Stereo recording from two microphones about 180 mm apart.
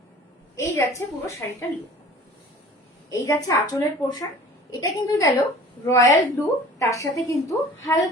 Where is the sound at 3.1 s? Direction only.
20° left (ahead or behind).